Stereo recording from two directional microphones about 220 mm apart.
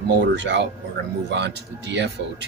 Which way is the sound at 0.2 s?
55° right (ahead or behind).